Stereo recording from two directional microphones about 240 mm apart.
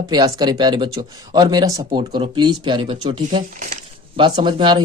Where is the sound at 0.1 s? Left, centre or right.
Centre.